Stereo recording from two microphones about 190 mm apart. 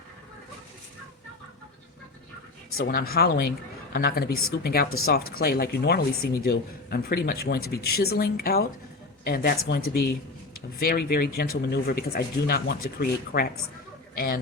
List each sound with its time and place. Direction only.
2.7 s speech: 50° left (ahead or behind)